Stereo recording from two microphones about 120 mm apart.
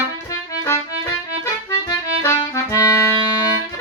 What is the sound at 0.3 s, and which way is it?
Music, 25° left (ahead or behind).